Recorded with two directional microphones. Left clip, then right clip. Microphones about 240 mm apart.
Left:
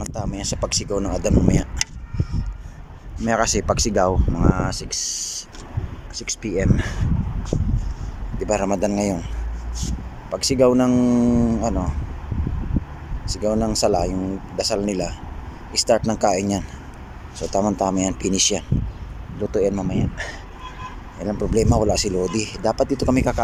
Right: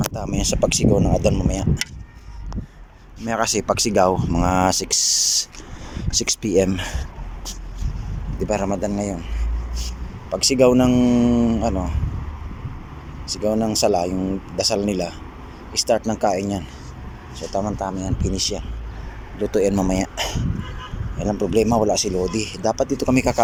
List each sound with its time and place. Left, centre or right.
0.1 s a man's voice: centre
3.2 s speech: centre
8.4 s a man's voice: centre
10.2 s a man's voice: centre
13.2 s a man's voice: centre
19.4 s speech: centre
21.2 s a man's voice: centre